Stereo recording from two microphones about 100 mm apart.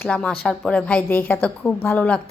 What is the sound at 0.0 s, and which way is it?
A woman's voice, 10° left (ahead or behind).